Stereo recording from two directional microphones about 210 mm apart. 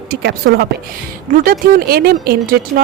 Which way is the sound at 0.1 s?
50° right (ahead or behind).